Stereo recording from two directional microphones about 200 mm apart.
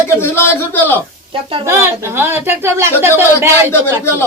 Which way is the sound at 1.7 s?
10° right (ahead or behind).